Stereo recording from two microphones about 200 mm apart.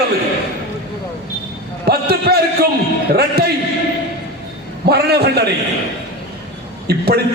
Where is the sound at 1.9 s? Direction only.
50° right (ahead or behind).